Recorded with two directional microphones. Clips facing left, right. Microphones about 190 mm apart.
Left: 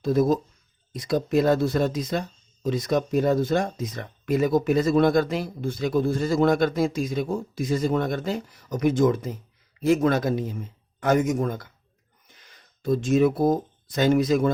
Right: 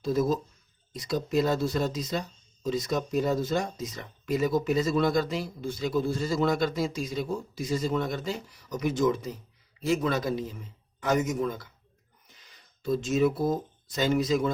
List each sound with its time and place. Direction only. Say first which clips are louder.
0.0 s speech: left 5 dB; 55° left (ahead or behind)